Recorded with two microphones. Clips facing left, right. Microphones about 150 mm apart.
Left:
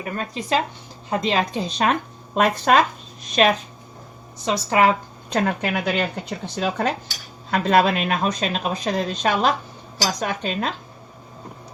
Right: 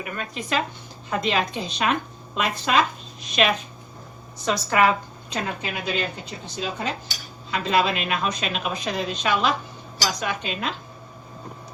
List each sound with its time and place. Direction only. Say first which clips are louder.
0.0 s speech: left 3 dB; 35° left (ahead or behind); by 2.8 s 50° left (ahead or behind)
3.2 s speech: left 4 dB; 40° left (ahead or behind)
4.4 s speech: left 2 dB; 30° left (ahead or behind)
5.3 s a woman's voice: left 7 dB; 55° left (ahead or behind); by 10.8 s 40° left (ahead or behind)